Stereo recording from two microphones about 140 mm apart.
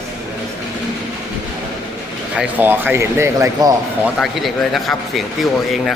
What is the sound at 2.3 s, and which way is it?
Speech, 15° right (ahead or behind).